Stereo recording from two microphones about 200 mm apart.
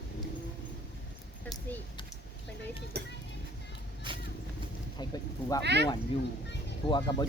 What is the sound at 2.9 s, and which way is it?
Music, 50° right (ahead or behind).